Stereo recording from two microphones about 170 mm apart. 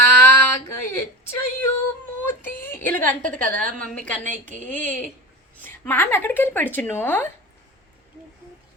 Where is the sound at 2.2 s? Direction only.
10° left (ahead or behind).